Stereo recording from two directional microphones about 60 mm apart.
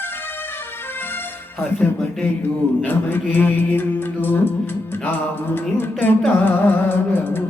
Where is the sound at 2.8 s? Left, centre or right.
Left.